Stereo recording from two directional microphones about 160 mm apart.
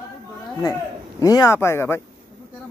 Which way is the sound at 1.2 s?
20° left (ahead or behind).